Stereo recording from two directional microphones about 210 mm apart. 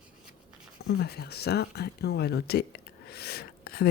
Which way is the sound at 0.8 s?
50° left (ahead or behind).